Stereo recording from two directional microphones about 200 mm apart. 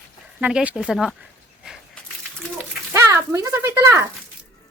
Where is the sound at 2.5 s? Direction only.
10° right (ahead or behind).